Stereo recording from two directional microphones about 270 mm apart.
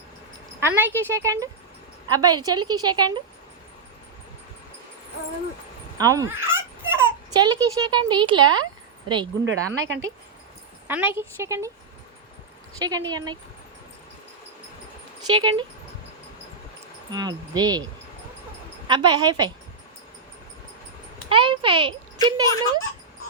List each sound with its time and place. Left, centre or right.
0.6 s speech: centre
6.0 s dog: centre
7.3 s speech: centre
9.4 s speech: right
10.8 s speech: centre
12.8 s speech: centre
15.3 s speech: centre
17.1 s speech: centre
18.9 s speech: centre
21.2 s a child's voice: centre